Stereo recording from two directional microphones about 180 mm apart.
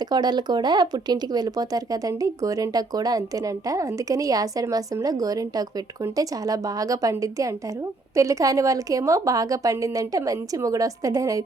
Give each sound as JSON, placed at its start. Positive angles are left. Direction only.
{"t": 0.0, "sound": "speech", "side_deg": -20}